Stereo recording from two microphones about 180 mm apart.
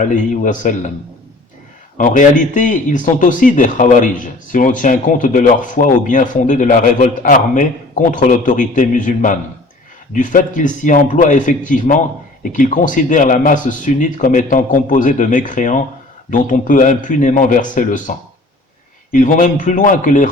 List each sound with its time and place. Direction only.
0.0 s a man's voice: 45° left (ahead or behind)
2.0 s a man's voice: 45° left (ahead or behind)
19.1 s a man's voice: 45° left (ahead or behind)